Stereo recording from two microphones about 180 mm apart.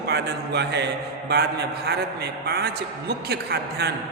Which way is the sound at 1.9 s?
60° right (ahead or behind).